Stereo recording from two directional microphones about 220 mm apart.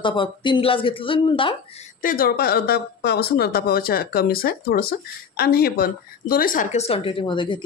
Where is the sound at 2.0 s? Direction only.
40° left (ahead or behind); by 7.6 s 20° left (ahead or behind).